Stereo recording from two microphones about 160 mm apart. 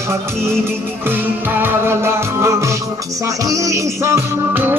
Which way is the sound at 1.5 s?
15° right (ahead or behind).